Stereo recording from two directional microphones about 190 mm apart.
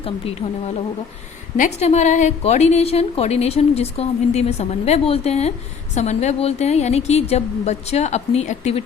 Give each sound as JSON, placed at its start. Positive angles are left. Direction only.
{"t": 0.4, "sound": "a woman's voice", "side_deg": 30}